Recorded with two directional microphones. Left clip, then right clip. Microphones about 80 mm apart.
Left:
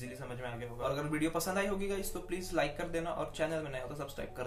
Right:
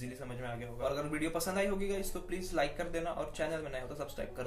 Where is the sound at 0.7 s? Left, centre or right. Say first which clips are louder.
Even; left.